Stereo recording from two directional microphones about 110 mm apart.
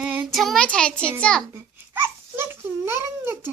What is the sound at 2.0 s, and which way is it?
Babbling, 20° right (ahead or behind).